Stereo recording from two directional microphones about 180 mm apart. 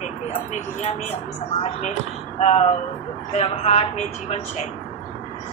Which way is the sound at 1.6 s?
40° left (ahead or behind).